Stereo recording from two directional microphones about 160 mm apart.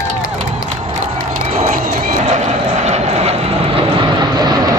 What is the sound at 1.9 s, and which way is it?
Vehicle, 45° right (ahead or behind).